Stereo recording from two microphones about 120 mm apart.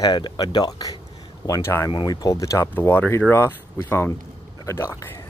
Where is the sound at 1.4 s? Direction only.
25° left (ahead or behind).